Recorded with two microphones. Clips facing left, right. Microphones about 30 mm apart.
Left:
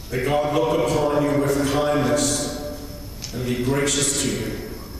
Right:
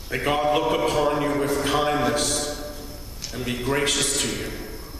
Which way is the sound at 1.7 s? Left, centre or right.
Centre.